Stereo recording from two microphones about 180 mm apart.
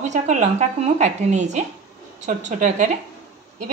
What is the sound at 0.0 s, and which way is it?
A woman's voice, 40° right (ahead or behind).